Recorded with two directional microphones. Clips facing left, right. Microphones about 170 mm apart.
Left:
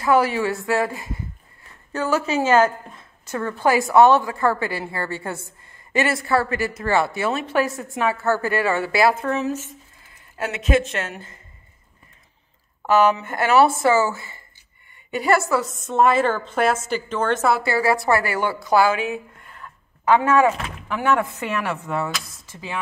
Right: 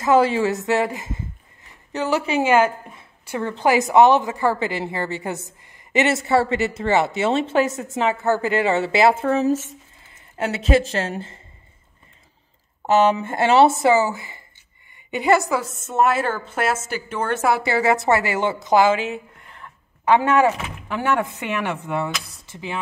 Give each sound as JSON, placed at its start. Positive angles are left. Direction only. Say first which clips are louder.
{"t": 0.0, "sound": "a woman's voice", "louder": "right 2 dB", "side_deg": -25}
{"t": 12.8, "sound": "a woman's voice", "louder": "right 1 dB", "side_deg": -25}